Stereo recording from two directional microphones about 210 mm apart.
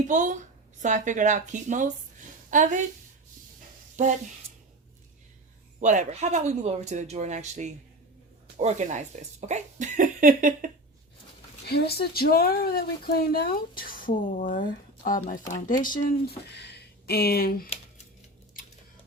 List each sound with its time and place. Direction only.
0.1 s speech: 35° right (ahead or behind)
4.0 s speech: 35° right (ahead or behind)
5.8 s speech: 35° right (ahead or behind)
11.6 s speech: 50° left (ahead or behind)
16.5 s speech: 55° left (ahead or behind)